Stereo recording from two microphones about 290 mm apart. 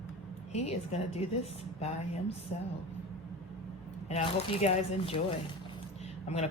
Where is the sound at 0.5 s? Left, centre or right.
Left.